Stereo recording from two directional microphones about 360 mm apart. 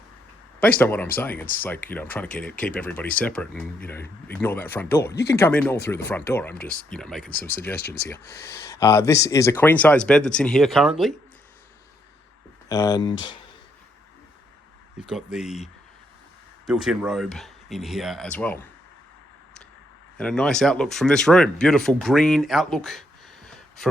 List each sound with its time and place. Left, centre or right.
0.8 s speech: centre
7.8 s speech: left
8.0 s speech: centre
12.6 s speech: centre
14.9 s speech: centre
16.6 s speech: centre
20.1 s speech: centre
23.5 s a sound: centre